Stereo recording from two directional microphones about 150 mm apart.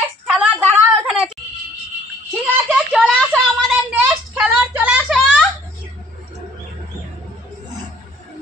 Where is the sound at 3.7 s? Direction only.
10° right (ahead or behind).